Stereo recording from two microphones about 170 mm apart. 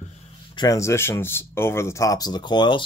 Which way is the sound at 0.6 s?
20° left (ahead or behind).